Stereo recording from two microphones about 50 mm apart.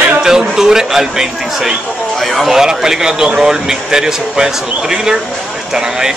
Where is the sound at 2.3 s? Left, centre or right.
Centre.